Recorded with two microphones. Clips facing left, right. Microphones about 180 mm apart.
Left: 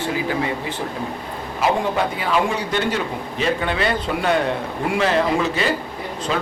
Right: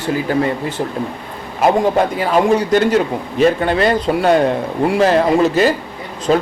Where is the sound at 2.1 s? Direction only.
45° right (ahead or behind).